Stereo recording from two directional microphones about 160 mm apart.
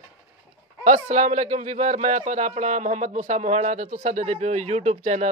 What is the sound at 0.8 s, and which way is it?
A man's voice, 50° right (ahead or behind).